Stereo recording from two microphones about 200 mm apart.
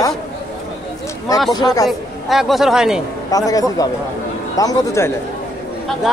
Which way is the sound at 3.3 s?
15° left (ahead or behind).